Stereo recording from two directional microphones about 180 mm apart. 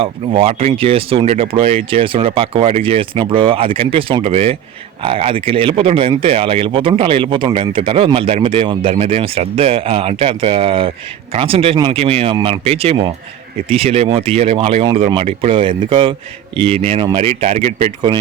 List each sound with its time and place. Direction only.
0.0 s speech: 30° right (ahead or behind)